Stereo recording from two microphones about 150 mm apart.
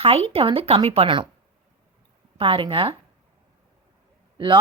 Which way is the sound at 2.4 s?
35° right (ahead or behind).